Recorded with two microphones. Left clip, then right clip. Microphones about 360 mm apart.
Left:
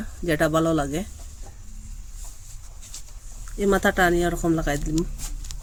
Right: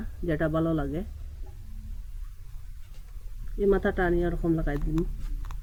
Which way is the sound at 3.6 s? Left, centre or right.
Left.